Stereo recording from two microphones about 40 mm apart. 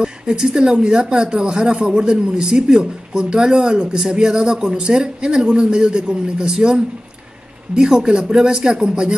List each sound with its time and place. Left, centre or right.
0.0 s speech: centre